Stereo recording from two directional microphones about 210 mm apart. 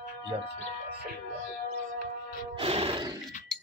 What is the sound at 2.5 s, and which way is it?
Music, 25° right (ahead or behind).